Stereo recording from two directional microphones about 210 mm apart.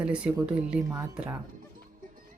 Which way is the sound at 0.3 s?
15° right (ahead or behind).